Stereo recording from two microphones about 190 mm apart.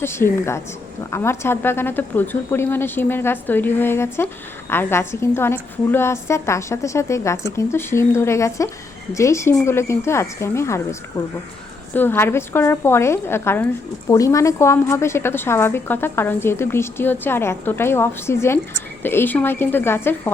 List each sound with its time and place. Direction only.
0.0 s a woman's voice: 15° left (ahead or behind)
11.9 s a woman's voice: 10° left (ahead or behind)